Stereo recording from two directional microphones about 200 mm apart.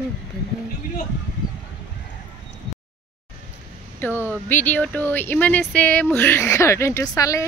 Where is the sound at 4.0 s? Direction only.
10° left (ahead or behind).